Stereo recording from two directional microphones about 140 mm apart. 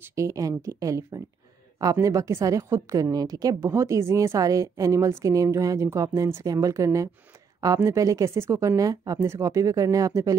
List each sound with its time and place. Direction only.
0.0 s a woman's voice: 20° right (ahead or behind)